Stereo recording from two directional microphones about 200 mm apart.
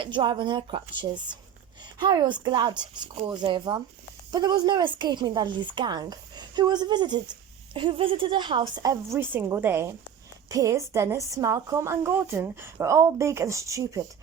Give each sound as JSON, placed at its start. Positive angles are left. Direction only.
{"t": 0.0, "sound": "a woman's voice", "side_deg": -25}